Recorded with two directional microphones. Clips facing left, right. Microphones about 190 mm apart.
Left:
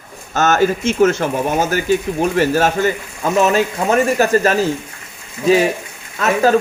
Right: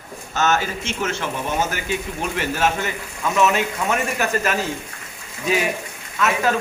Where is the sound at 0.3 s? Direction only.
45° left (ahead or behind).